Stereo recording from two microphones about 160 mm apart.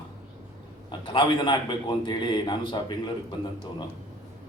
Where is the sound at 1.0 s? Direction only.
30° left (ahead or behind).